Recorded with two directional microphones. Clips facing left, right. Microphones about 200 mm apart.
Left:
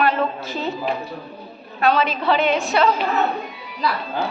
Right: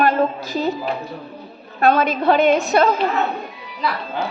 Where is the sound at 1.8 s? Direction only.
50° right (ahead or behind).